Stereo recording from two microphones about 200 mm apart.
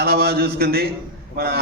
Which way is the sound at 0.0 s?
50° right (ahead or behind).